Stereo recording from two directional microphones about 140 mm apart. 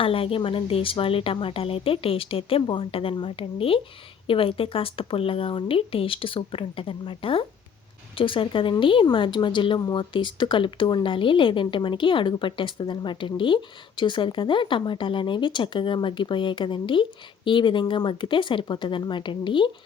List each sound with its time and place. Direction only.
0.0 s speech: 40° left (ahead or behind)